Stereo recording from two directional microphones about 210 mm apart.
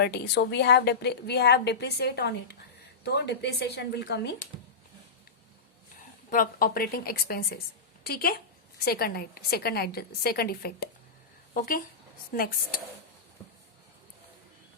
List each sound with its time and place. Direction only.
0.0 s a woman's voice: 50° left (ahead or behind)
6.3 s a woman's voice: 40° left (ahead or behind)